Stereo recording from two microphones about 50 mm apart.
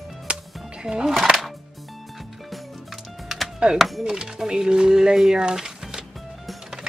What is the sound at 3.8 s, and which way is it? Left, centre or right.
Speech, centre.